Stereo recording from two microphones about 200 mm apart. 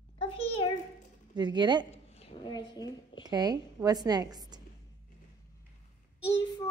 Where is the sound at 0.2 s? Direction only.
25° left (ahead or behind).